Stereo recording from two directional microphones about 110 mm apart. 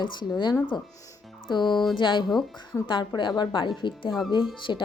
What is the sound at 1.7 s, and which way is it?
Speech, 5° left (ahead or behind).